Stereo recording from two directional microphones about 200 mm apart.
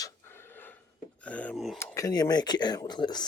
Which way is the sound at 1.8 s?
15° left (ahead or behind).